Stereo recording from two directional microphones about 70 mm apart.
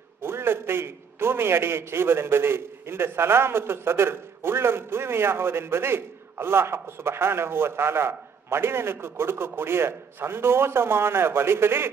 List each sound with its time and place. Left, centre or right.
0.2 s a man's voice: right